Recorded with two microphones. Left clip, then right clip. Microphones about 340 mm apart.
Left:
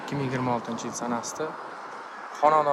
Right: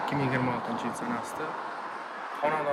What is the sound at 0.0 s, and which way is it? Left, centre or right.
Speech, centre.